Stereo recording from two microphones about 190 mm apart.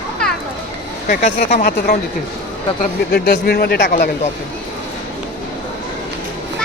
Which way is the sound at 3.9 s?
40° left (ahead or behind).